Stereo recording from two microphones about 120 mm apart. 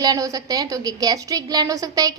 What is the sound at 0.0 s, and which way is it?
A woman's voice, 30° right (ahead or behind).